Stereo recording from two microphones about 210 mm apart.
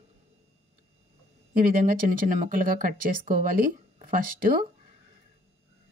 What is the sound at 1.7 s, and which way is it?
Speech, 40° right (ahead or behind).